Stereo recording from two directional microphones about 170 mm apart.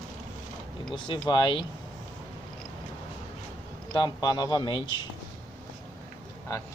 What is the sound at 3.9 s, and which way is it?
Speech, 25° left (ahead or behind).